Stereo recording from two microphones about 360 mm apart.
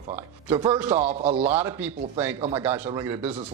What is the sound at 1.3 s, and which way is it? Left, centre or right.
Speech, centre.